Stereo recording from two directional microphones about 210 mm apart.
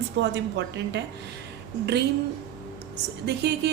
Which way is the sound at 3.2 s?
50° right (ahead or behind).